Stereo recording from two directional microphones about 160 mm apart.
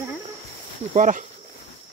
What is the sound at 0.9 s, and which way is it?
Speech, 55° right (ahead or behind).